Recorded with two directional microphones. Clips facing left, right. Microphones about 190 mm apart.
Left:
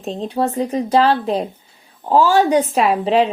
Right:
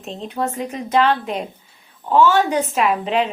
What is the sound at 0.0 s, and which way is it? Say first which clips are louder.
Speech: left 4 dB; 35° left (ahead or behind).